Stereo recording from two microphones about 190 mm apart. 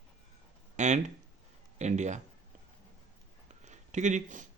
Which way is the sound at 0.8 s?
40° right (ahead or behind).